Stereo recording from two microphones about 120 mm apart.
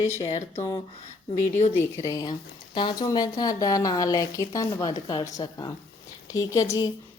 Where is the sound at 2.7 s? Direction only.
40° left (ahead or behind).